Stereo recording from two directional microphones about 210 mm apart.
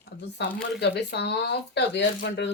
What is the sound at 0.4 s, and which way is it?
A woman's voice, 55° left (ahead or behind).